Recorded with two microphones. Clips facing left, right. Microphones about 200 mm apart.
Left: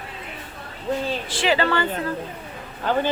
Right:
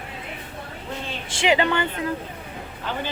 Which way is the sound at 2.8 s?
45° left (ahead or behind).